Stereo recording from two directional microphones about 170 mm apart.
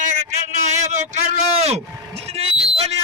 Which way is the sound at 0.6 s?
45° right (ahead or behind).